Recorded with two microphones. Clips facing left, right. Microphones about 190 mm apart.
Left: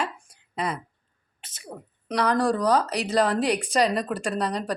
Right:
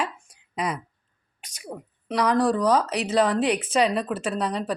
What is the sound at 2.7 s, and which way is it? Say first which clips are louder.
Speech: right 1 dB; 35° left (ahead or behind).